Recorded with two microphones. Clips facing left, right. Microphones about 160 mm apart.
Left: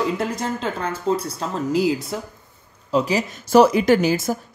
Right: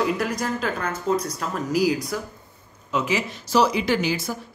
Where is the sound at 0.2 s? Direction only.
25° left (ahead or behind).